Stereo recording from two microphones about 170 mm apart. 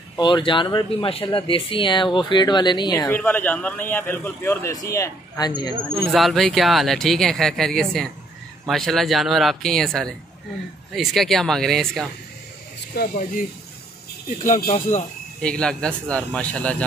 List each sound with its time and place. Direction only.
0.2 s speech: 30° left (ahead or behind)
3.1 s a man's voice: 10° left (ahead or behind)
6.1 s speech: centre (ahead or behind)
12.9 s speech: 60° left (ahead or behind)
14.4 s speech: 50° left (ahead or behind)
15.4 s a man's voice: 5° left (ahead or behind)